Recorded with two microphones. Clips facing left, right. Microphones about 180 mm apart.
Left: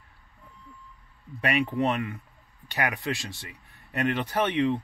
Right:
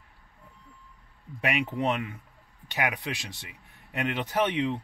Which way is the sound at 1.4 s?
15° right (ahead or behind).